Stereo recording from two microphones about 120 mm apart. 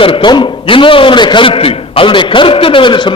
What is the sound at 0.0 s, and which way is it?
A man's voice, 45° left (ahead or behind).